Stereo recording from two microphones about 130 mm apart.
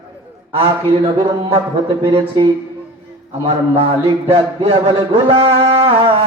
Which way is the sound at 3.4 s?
45° right (ahead or behind).